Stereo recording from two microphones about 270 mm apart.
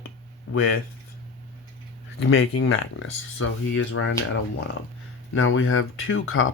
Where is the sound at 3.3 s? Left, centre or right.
Left.